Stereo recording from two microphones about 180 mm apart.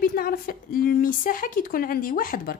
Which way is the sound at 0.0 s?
55° left (ahead or behind).